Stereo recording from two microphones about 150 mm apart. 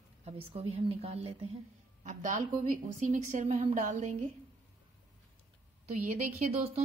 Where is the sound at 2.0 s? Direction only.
55° right (ahead or behind).